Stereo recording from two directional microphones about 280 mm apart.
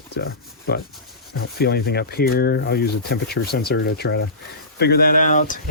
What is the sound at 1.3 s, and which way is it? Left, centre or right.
Speech, left.